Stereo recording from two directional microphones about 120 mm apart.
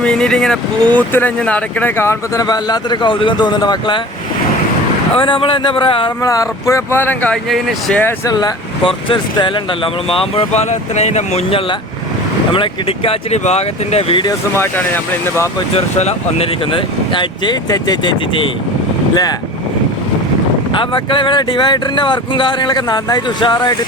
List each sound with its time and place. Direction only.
0.0 s speech: 5° left (ahead or behind); by 4.0 s 40° left (ahead or behind)
5.1 s speech: 45° left (ahead or behind)
6.2 s speech: 30° left (ahead or behind)
7.5 s speech: centre (ahead or behind)
8.3 s speech: 35° left (ahead or behind)
8.8 s speech: 50° left (ahead or behind); by 11.6 s 65° left (ahead or behind)
12.5 s speech: 45° left (ahead or behind)
13.3 s speech: 65° left (ahead or behind)
14.5 s speech: 20° left (ahead or behind)
15.7 s speech: 60° left (ahead or behind)
16.7 s speech: 40° left (ahead or behind)
20.7 s speech: 45° left (ahead or behind)